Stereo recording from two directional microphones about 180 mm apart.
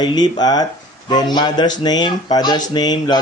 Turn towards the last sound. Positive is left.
turn(degrees=25)  # may be behind; listen again after turning